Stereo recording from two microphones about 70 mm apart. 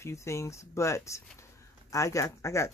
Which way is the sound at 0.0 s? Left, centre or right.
Left.